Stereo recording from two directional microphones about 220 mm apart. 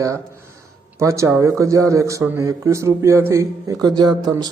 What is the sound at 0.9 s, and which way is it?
A man's voice, 15° right (ahead or behind).